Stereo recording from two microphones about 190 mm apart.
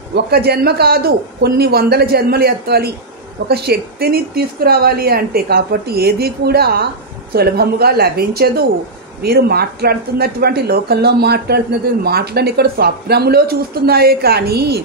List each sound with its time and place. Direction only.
0.1 s speech: 60° right (ahead or behind)